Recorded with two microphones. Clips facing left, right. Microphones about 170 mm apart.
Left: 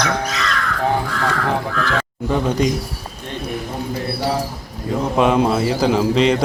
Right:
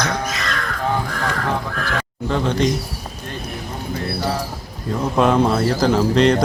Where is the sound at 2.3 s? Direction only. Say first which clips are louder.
Left 1 dB; 10° left (ahead or behind).